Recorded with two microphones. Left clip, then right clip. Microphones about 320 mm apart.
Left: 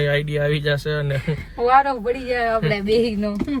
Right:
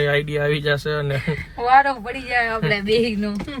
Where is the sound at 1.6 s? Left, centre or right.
Centre.